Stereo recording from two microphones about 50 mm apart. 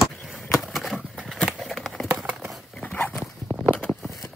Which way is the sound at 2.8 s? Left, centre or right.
Left.